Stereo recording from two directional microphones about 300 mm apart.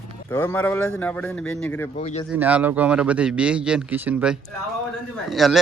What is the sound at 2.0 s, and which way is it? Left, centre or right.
Speech, left.